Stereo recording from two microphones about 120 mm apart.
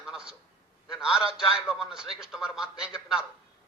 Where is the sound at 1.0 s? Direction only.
5° right (ahead or behind).